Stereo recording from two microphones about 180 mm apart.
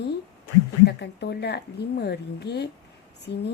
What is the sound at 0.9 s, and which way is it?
A woman's voice, 70° left (ahead or behind).